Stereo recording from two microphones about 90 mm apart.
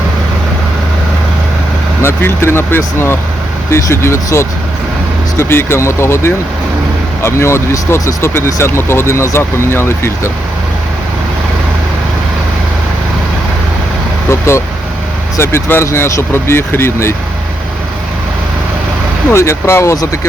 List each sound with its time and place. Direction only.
2.0 s speech: 30° left (ahead or behind)
14.3 s speech: 30° left (ahead or behind)
19.3 s speech: 30° left (ahead or behind)